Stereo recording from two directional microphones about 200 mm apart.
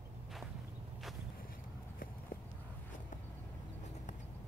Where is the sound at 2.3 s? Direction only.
45° left (ahead or behind).